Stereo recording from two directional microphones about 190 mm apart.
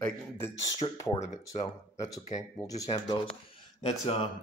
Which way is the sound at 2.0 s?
20° left (ahead or behind).